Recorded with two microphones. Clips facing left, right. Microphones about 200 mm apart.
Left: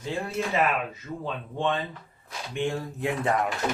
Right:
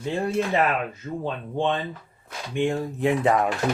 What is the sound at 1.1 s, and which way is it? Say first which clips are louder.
Speech: right 5 dB; 20° right (ahead or behind).